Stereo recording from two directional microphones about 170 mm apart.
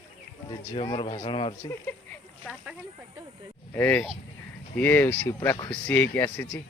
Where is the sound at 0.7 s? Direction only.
30° left (ahead or behind).